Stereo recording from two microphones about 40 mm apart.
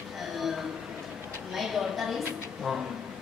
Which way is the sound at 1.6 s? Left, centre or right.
Centre.